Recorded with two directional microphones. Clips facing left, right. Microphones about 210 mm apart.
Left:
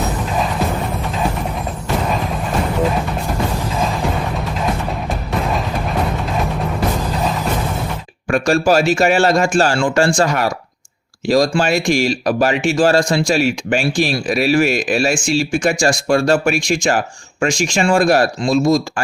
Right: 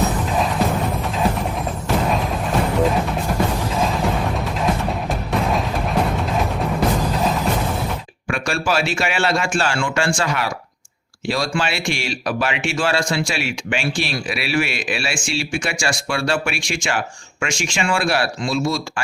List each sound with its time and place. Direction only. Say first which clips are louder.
2.0 s music: even; centre (ahead or behind)
8.3 s speech: left 8 dB; 40° left (ahead or behind)